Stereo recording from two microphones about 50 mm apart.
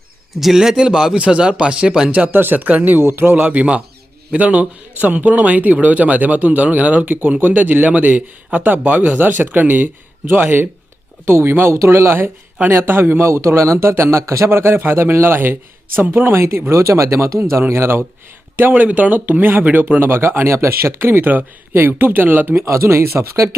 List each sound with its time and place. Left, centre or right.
0.3 s speech: centre; by 2.3 s right
2.3 s speech: right
3.0 s speech: right
3.6 s speech: right
11.3 s a man's voice: right
11.7 s a man's voice: right
14.5 s speech: right
16.4 s speech: right
17.7 s a man's voice: right
18.7 s speech: right
21.0 s speech: right
22.7 s speech: right